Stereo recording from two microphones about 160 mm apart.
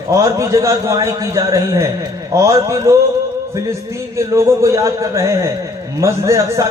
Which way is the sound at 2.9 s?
15° right (ahead or behind).